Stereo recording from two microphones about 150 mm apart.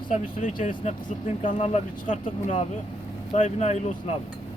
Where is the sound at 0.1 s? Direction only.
60° left (ahead or behind).